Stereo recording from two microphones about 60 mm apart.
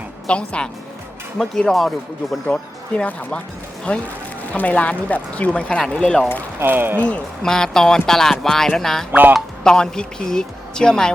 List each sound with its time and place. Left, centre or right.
0.3 s speech: centre
6.6 s speech: right
7.4 s speech: centre